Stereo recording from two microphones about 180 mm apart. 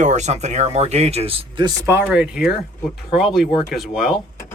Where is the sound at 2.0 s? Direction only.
5° right (ahead or behind).